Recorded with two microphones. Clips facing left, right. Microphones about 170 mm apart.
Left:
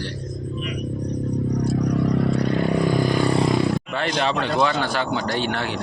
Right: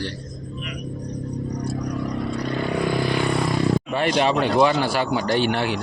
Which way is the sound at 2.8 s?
45° left (ahead or behind).